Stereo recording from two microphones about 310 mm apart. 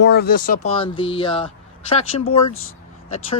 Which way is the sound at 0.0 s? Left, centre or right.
Left.